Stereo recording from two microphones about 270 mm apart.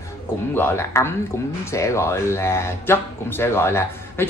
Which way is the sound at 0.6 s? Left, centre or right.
Centre.